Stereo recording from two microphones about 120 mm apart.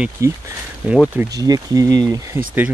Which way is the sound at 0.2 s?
25° right (ahead or behind).